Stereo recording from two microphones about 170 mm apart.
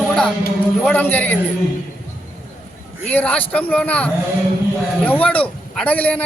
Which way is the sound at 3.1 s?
10° left (ahead or behind).